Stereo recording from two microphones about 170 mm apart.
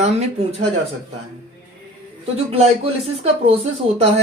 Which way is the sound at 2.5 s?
35° right (ahead or behind).